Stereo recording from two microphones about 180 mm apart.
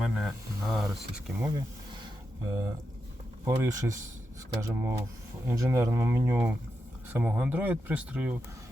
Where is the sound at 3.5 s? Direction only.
15° right (ahead or behind).